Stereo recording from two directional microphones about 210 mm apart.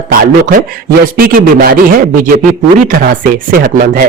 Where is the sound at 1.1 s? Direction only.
45° right (ahead or behind).